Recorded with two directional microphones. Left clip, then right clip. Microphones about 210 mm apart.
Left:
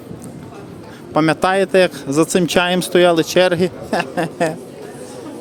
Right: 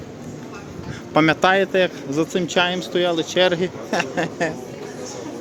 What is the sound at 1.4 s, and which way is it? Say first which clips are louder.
Speech: left 3 dB; 20° left (ahead or behind).